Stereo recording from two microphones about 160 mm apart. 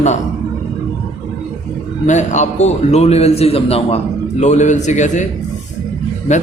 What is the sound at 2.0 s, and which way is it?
A man's voice, 50° left (ahead or behind).